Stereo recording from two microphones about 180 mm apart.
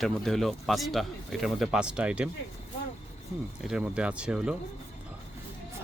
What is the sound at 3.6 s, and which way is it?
Speech, centre (ahead or behind).